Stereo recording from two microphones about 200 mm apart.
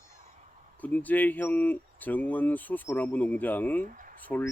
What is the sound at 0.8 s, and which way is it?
Speech, 10° left (ahead or behind).